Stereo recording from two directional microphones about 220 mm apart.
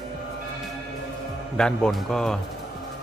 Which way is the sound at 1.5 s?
5° left (ahead or behind).